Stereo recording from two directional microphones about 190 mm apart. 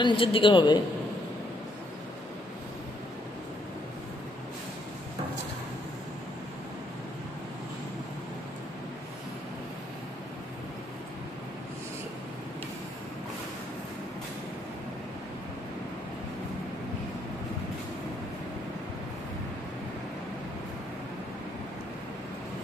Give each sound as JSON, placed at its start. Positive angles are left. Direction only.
{"t": 0.0, "sound": "a woman's voice", "side_deg": 30}